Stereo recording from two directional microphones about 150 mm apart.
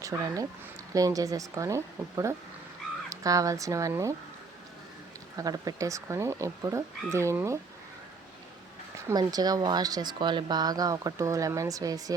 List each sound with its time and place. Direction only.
0.1 s speech: 15° right (ahead or behind)
5.4 s speech: 25° right (ahead or behind)
9.0 s speech: 25° right (ahead or behind)